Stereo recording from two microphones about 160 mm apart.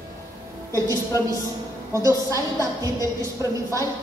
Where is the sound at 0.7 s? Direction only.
20° right (ahead or behind).